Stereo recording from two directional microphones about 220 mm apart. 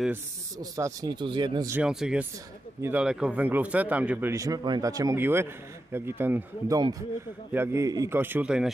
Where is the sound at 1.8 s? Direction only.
5° right (ahead or behind).